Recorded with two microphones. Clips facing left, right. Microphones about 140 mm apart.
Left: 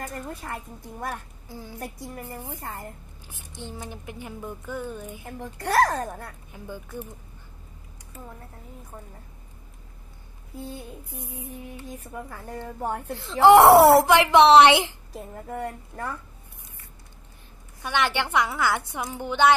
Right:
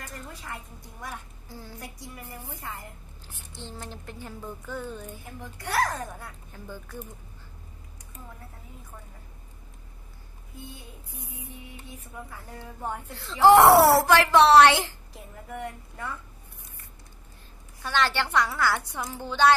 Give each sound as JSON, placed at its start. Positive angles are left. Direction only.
{"t": 0.0, "sound": "a woman's voice", "side_deg": 50}
{"t": 1.5, "sound": "speech", "side_deg": 15}
{"t": 1.8, "sound": "speech", "side_deg": 55}
{"t": 3.3, "sound": "speech", "side_deg": 15}
{"t": 5.2, "sound": "speech", "side_deg": 60}
{"t": 6.5, "sound": "speech", "side_deg": 15}
{"t": 12.1, "sound": "speech", "side_deg": 50}
{"t": 13.1, "sound": "speech", "side_deg": 20}
{"t": 15.4, "sound": "speech", "side_deg": 35}
{"t": 17.8, "sound": "speech", "side_deg": 20}